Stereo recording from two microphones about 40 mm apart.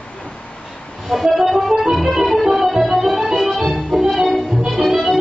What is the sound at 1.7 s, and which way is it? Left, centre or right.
Music, centre.